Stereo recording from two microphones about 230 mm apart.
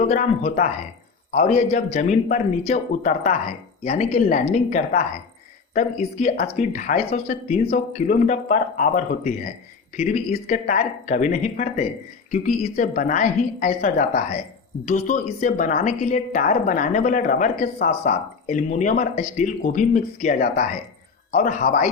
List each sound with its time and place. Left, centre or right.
0.1 s speech: left